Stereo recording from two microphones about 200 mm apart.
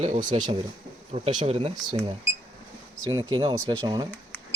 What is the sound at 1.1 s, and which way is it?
Speech, 35° right (ahead or behind).